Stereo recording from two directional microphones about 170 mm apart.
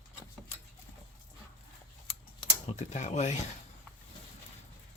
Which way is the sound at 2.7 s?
45° left (ahead or behind).